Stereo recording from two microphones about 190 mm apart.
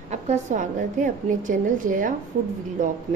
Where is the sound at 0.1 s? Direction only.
40° right (ahead or behind).